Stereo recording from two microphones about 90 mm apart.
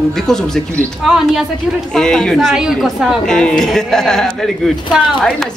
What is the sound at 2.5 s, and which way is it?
Speech, 5° right (ahead or behind).